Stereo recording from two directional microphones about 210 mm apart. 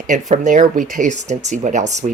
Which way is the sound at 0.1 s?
35° right (ahead or behind).